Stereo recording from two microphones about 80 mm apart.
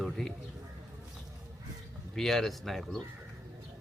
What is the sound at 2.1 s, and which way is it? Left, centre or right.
Speech, centre.